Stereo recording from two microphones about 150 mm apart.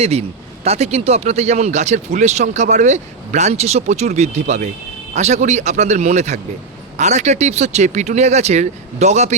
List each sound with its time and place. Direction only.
0.0 s speech: 45° right (ahead or behind)